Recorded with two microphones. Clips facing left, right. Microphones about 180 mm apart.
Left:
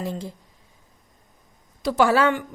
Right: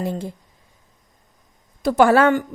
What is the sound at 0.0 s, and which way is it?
Speech, 55° right (ahead or behind).